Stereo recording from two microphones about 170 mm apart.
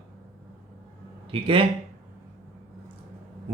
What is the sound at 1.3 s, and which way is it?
Speech, 30° right (ahead or behind).